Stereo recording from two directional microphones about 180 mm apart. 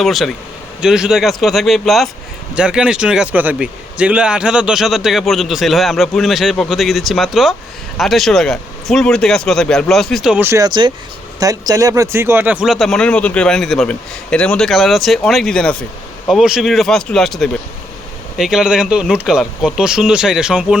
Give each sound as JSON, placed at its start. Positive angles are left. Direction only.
{"t": 0.0, "sound": "speech", "side_deg": 0}
{"t": 10.7, "sound": "speech", "side_deg": -25}